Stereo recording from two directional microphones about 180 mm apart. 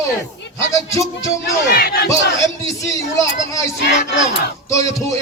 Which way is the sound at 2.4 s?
15° left (ahead or behind).